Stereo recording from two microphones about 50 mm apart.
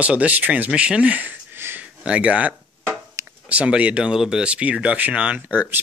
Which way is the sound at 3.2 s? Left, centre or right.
Right.